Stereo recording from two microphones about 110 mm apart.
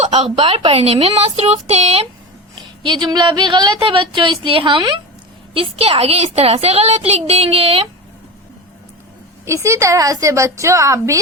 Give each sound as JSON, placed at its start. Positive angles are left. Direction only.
{"t": 0.3, "sound": "speech", "side_deg": -60}
{"t": 2.8, "sound": "speech", "side_deg": -45}
{"t": 5.5, "sound": "speech", "side_deg": -60}
{"t": 9.6, "sound": "a woman's voice", "side_deg": -30}